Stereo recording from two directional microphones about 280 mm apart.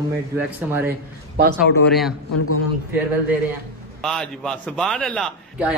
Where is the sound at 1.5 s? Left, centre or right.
Centre.